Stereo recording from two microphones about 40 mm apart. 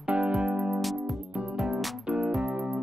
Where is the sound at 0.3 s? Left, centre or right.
Centre.